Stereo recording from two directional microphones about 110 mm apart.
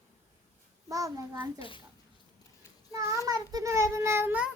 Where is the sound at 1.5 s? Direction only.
50° left (ahead or behind).